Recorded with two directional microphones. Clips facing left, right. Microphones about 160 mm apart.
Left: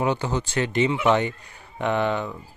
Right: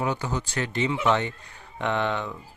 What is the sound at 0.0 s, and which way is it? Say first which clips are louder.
Speech: left 4 dB; 25° left (ahead or behind).